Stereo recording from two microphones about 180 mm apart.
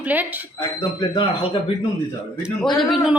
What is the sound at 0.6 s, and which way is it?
Speech, 25° left (ahead or behind).